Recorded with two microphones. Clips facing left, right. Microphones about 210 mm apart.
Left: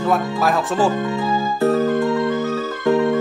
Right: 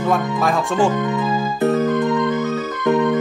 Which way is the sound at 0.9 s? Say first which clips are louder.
Right 1 dB; 20° right (ahead or behind).